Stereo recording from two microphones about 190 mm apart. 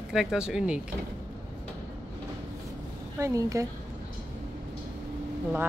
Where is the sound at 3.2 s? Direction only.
15° right (ahead or behind).